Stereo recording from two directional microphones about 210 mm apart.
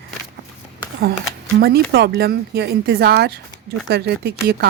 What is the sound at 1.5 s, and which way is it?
Speech, 50° right (ahead or behind).